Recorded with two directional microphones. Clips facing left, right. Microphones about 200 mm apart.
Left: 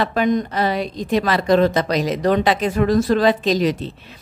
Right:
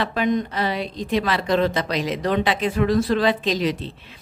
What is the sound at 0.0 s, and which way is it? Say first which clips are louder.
A woman's voice: left 3 dB; 45° left (ahead or behind).